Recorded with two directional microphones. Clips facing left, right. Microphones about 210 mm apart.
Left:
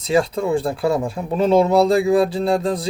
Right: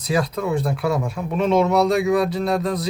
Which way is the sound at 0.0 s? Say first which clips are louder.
Left 4 dB; 25° left (ahead or behind).